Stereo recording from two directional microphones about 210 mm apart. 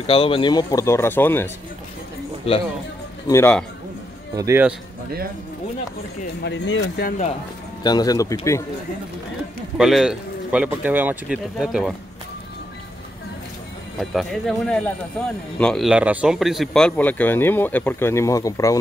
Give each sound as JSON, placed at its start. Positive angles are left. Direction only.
{"t": 0.0, "sound": "speech", "side_deg": 25}
{"t": 2.4, "sound": "speech", "side_deg": 30}
{"t": 3.3, "sound": "speech", "side_deg": 15}
{"t": 4.4, "sound": "a man's voice", "side_deg": -10}
{"t": 6.4, "sound": "speech", "side_deg": 60}
{"t": 7.1, "sound": "speech", "side_deg": 35}
{"t": 7.8, "sound": "speech", "side_deg": 20}
{"t": 9.8, "sound": "speech", "side_deg": 0}
{"t": 14.1, "sound": "speech", "side_deg": 0}